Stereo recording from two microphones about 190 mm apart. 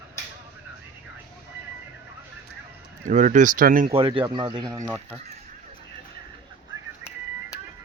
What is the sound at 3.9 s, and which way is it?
Speech, 25° right (ahead or behind).